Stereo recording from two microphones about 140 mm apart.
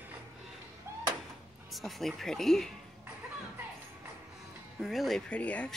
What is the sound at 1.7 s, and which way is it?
Speech, centre (ahead or behind).